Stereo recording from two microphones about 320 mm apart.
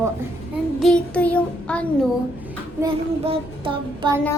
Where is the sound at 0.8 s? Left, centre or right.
Centre.